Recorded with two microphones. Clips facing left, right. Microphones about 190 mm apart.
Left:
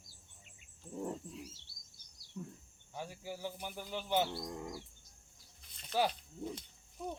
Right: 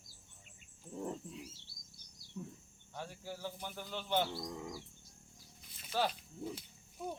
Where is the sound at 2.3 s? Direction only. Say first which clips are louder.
Even; 5° right (ahead or behind).